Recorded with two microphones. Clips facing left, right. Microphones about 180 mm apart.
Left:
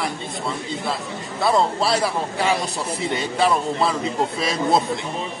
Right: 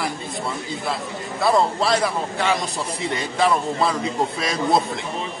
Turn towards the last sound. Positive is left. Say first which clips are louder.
# left 1 dB
turn(degrees=0)  # may be behind; listen again after turning